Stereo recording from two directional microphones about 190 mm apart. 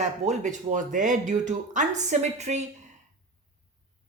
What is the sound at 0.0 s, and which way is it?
A woman's voice, 40° right (ahead or behind).